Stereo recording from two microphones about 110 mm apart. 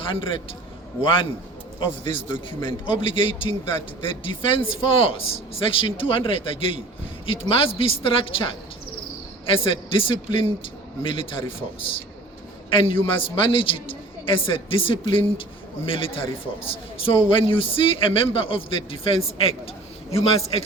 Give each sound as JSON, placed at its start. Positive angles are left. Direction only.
{"t": 0.0, "sound": "a man's voice", "side_deg": 50}